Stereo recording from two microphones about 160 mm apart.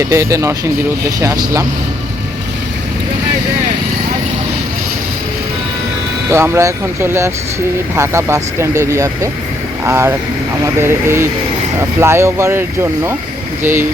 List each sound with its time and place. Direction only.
0.0 s speech: 20° right (ahead or behind)
6.3 s speech: 15° right (ahead or behind)